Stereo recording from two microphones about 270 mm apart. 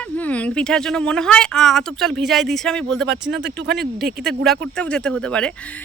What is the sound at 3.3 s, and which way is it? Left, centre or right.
Speech, right.